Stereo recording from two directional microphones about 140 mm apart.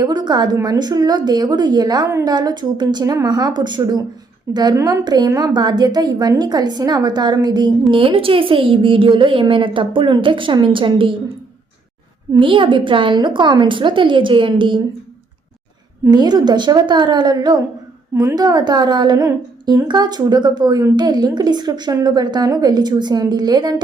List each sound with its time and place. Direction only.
0.0 s a woman's voice: 30° right (ahead or behind)
12.3 s a woman's voice: 35° right (ahead or behind)
16.0 s a woman's voice: 30° right (ahead or behind)